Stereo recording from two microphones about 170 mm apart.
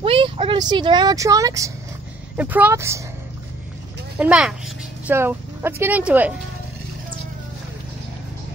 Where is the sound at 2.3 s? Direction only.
10° right (ahead or behind).